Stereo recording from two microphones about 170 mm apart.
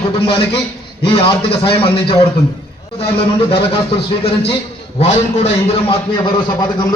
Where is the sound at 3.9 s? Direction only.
35° left (ahead or behind).